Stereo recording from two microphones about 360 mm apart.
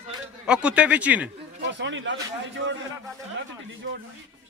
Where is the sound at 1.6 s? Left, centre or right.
Right.